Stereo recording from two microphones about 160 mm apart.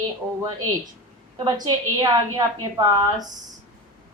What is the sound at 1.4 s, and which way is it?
A woman's voice, 25° right (ahead or behind).